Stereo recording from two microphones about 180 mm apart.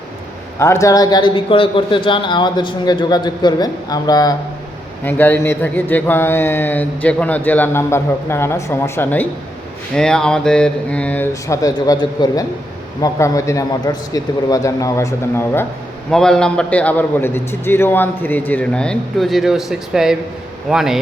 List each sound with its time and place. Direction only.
0.6 s speech: 15° left (ahead or behind)
16.1 s a man's voice: 5° left (ahead or behind)